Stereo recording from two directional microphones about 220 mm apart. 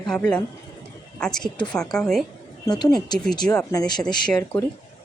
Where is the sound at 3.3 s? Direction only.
20° left (ahead or behind).